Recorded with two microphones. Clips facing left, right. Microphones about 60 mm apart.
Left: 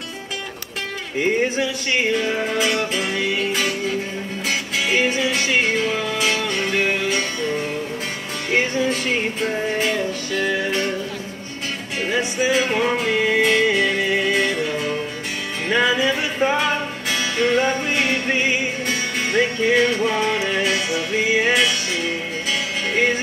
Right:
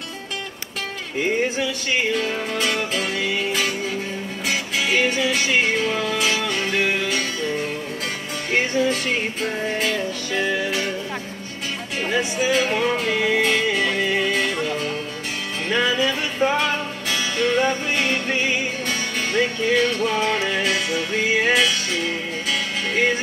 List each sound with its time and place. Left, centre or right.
1.6 s music: centre
4.7 s music: centre
8.5 s music: centre
12.1 s music: centre